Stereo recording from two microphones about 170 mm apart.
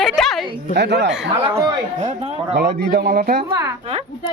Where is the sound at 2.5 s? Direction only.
65° right (ahead or behind).